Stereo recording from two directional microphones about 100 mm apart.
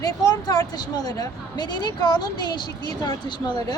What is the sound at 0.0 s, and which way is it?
Speech, 40° left (ahead or behind).